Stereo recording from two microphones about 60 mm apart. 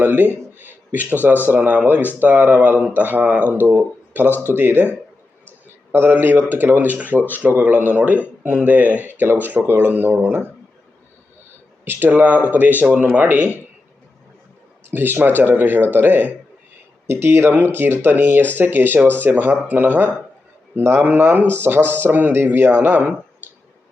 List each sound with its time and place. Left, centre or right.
0.0 s speech: right
5.9 s speech: right
11.9 s speech: right
14.8 s speech: right